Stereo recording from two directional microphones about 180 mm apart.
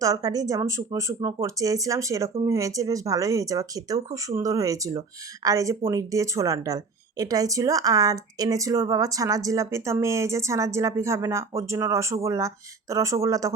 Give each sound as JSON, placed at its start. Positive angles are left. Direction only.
{"t": 0.0, "sound": "speech", "side_deg": -20}